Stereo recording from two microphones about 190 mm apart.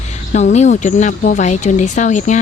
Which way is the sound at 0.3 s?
35° left (ahead or behind).